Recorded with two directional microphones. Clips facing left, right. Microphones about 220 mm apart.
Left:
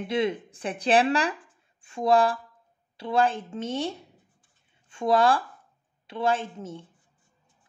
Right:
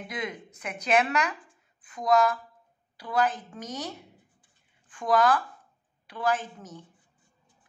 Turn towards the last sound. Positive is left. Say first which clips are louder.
# left 5 dB
turn(degrees=25)  # may be behind; listen again after turning